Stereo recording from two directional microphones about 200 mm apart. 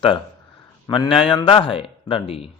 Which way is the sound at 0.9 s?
25° left (ahead or behind).